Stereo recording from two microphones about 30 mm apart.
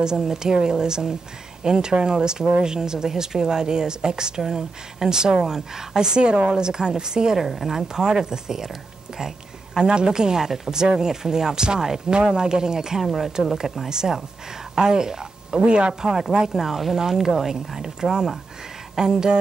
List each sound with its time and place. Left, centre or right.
0.0 s a woman's voice: right
7.3 s speech: centre
7.9 s a woman's voice: right
9.8 s a woman's voice: right
15.9 s a woman's voice: centre
18.9 s a woman's voice: right